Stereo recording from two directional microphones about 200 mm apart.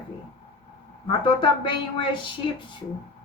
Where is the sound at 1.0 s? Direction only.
25° left (ahead or behind).